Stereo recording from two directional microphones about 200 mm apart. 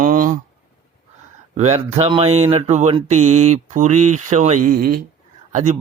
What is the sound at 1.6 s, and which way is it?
Speech, 30° right (ahead or behind).